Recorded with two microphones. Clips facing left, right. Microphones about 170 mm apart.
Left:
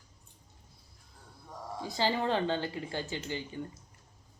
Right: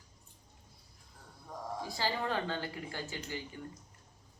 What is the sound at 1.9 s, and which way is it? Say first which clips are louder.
Speech: left 6 dB; 25° left (ahead or behind).